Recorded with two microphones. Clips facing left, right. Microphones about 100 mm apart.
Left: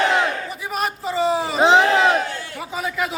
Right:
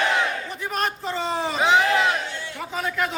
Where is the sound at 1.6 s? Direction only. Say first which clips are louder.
Left 4 dB; 30° left (ahead or behind).